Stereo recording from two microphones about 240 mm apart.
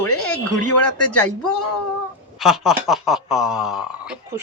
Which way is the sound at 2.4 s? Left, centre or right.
Centre.